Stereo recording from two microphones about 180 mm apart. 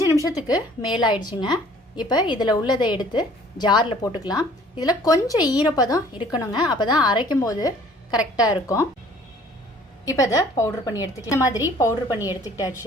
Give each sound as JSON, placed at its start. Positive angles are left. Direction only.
{"t": 0.1, "sound": "a woman's voice", "side_deg": 20}
{"t": 10.1, "sound": "a woman's voice", "side_deg": 20}
{"t": 12.1, "sound": "a woman's voice", "side_deg": -10}
{"t": 12.4, "sound": "a woman's voice", "side_deg": 20}